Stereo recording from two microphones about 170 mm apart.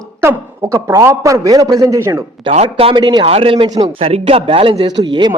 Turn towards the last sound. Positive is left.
turn(degrees=-25)  # may be behind; listen again after turning